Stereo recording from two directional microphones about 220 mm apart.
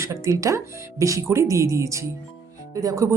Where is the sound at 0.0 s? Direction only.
15° right (ahead or behind).